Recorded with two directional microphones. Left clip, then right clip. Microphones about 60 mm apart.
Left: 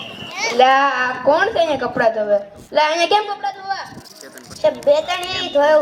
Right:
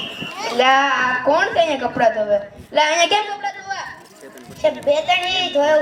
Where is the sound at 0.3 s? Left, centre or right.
Left.